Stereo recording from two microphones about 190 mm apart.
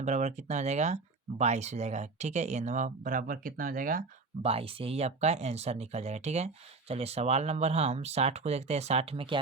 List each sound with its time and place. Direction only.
0.0 s speech: 35° right (ahead or behind)
4.4 s speech: 30° right (ahead or behind)